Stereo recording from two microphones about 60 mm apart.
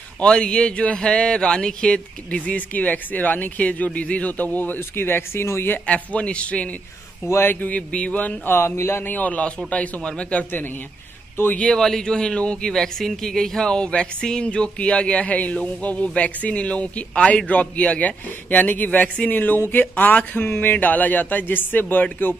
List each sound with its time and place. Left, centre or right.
0.2 s speech: centre
4.7 s speech: left
5.9 s speech: left
7.2 s speech: left
7.6 s speech: left
8.5 s speech: left
9.1 s speech: left
11.5 s speech: centre; by 22.3 s left